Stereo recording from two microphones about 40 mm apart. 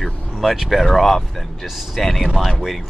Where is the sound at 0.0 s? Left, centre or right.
Centre.